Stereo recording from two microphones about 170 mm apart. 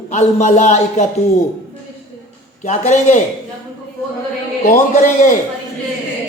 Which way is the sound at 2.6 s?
45° left (ahead or behind).